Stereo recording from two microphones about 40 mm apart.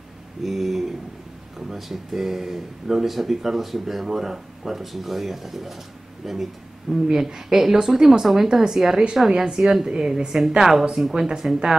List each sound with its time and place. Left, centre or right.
0.4 s speech: centre
7.1 s speech: centre